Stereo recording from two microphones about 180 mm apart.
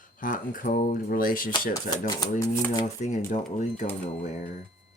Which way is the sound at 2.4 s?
15° left (ahead or behind).